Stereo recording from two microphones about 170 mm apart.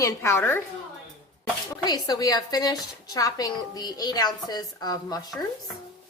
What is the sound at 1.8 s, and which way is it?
A woman's voice, 20° left (ahead or behind).